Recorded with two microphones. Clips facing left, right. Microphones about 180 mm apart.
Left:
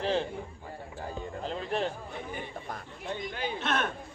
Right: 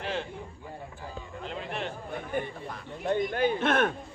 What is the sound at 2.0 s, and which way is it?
Chatter, 55° right (ahead or behind).